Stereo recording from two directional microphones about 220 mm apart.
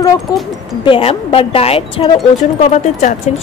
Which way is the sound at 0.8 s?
25° left (ahead or behind).